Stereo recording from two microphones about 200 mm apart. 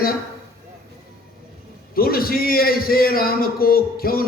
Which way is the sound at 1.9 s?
50° left (ahead or behind).